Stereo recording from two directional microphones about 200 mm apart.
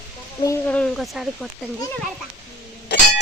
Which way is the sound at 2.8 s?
55° left (ahead or behind).